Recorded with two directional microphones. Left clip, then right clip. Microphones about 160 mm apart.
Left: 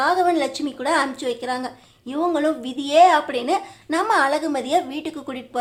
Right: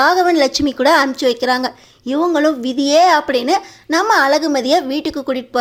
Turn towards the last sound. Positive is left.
turn(degrees=-30)  # may be behind; listen again after turning